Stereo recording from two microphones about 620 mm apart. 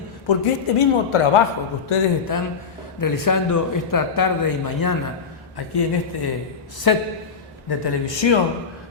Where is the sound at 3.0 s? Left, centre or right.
Left.